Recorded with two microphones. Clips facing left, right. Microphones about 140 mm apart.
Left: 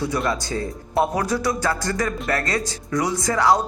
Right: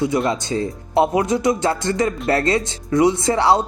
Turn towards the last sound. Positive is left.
turn(degrees=-25)  # may be behind; listen again after turning